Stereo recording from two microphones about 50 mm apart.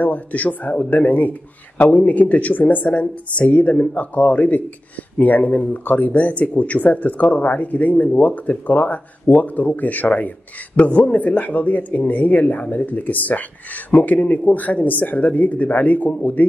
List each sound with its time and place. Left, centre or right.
0.0 s speech: left